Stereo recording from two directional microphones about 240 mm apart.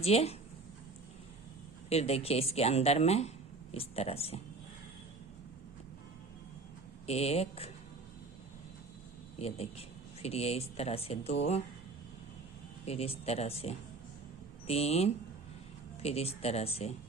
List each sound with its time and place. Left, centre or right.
0.0 s speech: left
1.9 s speech: left
7.1 s speech: left
9.4 s speech: left
12.8 s speech: left